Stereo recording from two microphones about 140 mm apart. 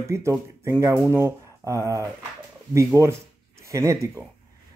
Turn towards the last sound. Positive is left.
turn(degrees=-20)  # may be behind; listen again after turning